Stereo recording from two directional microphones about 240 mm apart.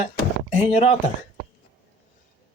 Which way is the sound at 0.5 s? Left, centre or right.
Left.